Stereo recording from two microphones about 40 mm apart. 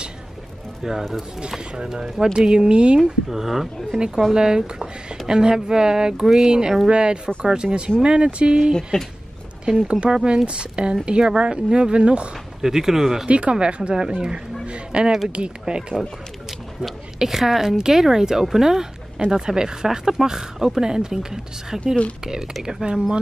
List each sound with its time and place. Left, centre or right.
0.8 s speech: centre
1.8 s speech: centre
3.0 s speech: centre
4.3 s speech: centre
8.9 s speech: left
9.7 s speech: right
12.6 s speech: centre
13.3 s speech: right
16.4 s speech: centre; by 23.2 s right